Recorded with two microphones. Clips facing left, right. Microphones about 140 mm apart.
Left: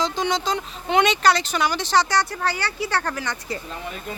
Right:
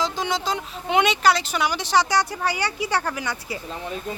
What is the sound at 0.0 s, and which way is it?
Speech, 5° right (ahead or behind).